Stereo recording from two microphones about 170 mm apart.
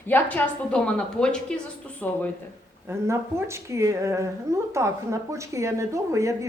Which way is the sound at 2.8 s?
15° right (ahead or behind).